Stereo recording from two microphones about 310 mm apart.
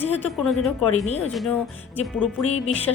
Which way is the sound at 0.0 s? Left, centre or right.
Centre.